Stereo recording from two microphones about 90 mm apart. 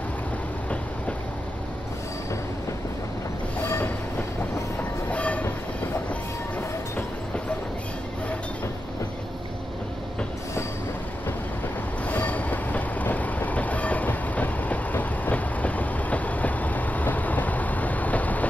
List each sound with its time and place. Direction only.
3.6 s train: 30° left (ahead or behind)
5.1 s train: 15° left (ahead or behind)
12.1 s train: 15° left (ahead or behind)